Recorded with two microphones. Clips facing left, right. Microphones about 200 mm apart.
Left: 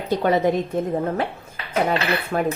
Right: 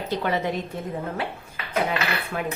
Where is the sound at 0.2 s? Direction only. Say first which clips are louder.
Left 7 dB; 40° left (ahead or behind).